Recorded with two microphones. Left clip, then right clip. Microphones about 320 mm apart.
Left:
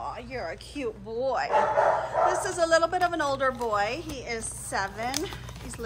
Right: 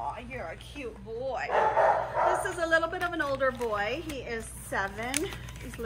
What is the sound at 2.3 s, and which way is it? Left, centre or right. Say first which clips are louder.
A woman's voice: left 3 dB; centre.